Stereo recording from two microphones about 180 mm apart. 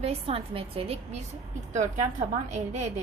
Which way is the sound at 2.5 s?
40° right (ahead or behind).